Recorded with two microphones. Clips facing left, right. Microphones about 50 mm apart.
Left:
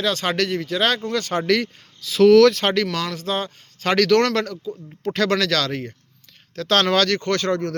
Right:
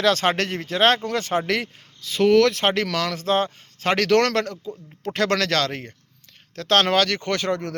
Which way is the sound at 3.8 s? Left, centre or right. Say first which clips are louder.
Left 2 dB; right.